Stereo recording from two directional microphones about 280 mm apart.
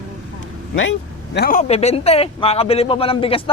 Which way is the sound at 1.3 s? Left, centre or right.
Left.